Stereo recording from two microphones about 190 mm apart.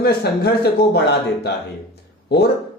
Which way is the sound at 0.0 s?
55° left (ahead or behind).